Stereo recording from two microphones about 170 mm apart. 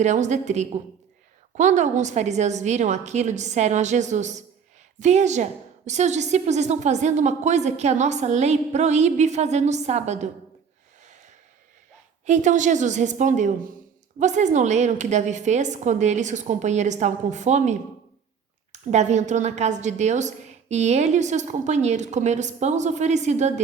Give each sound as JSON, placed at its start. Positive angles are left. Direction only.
{"t": 0.0, "sound": "a woman's voice", "side_deg": -45}
{"t": 12.2, "sound": "a woman's voice", "side_deg": -45}